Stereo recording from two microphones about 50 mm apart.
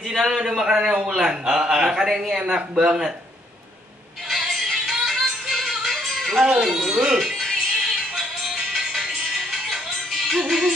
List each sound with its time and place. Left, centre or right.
0.2 s a man's voice: centre
2.8 s speech: right
4.3 s music: centre
6.5 s a man's voice: centre
7.2 s music: centre
10.4 s a man's voice: centre